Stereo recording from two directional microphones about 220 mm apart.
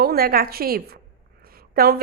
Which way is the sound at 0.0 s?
45° right (ahead or behind).